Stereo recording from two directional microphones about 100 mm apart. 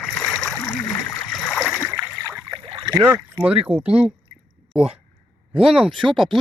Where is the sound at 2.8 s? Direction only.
35° right (ahead or behind).